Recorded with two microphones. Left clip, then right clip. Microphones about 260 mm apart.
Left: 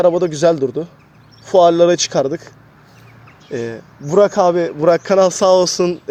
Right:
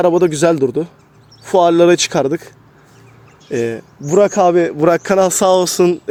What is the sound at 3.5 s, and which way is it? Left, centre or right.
Speech, right.